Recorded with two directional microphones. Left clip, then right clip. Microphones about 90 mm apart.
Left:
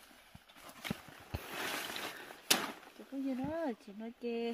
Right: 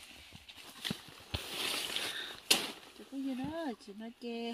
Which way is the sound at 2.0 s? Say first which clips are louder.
Right 5 dB; 5° left (ahead or behind).